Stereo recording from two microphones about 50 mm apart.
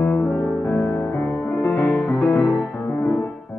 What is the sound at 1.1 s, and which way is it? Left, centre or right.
Music, left.